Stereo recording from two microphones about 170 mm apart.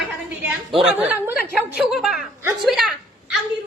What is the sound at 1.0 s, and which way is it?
A woman's voice, 10° right (ahead or behind).